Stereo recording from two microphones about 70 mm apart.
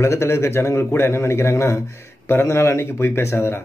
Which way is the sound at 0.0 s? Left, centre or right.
Left.